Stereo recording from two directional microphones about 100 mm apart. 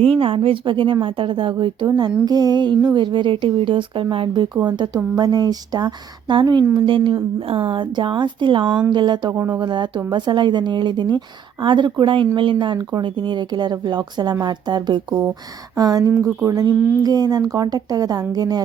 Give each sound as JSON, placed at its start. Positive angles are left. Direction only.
{"t": 0.0, "sound": "a woman's voice", "side_deg": -65}
{"t": 5.1, "sound": "speech", "side_deg": -40}
{"t": 6.7, "sound": "speech", "side_deg": -55}
{"t": 9.3, "sound": "speech", "side_deg": -30}
{"t": 9.6, "sound": "a woman's voice", "side_deg": -50}